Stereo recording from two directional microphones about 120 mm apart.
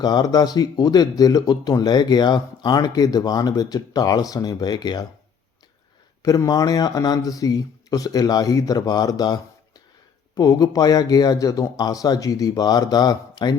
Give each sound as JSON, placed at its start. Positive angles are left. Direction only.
{"t": 0.0, "sound": "speech", "side_deg": 35}
{"t": 6.2, "sound": "speech", "side_deg": 30}